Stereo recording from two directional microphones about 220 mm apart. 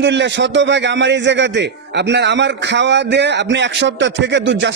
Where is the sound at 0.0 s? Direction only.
55° right (ahead or behind).